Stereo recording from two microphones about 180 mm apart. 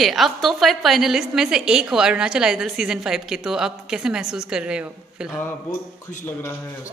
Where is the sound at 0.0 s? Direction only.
Centre (ahead or behind).